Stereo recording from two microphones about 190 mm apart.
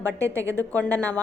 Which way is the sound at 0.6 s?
10° left (ahead or behind).